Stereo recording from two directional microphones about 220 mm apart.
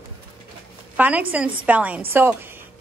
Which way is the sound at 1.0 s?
5° right (ahead or behind).